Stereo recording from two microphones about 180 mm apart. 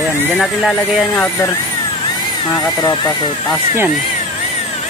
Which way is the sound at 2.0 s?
25° left (ahead or behind).